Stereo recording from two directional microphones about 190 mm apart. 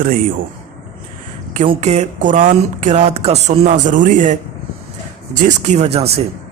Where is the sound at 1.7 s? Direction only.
35° right (ahead or behind).